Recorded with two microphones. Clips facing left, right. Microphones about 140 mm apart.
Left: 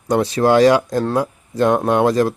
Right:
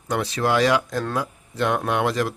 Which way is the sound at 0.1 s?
35° left (ahead or behind).